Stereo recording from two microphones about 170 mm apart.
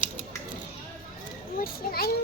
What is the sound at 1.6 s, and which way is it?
Speech, 60° left (ahead or behind).